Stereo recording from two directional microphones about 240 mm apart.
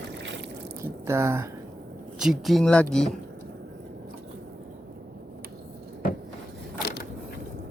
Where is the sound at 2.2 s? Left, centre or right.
Centre.